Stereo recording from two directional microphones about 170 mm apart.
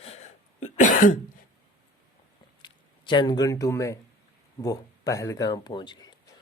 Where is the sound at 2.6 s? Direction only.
30° left (ahead or behind).